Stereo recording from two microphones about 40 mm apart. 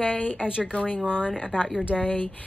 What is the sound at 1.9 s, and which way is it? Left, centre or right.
Speech, left.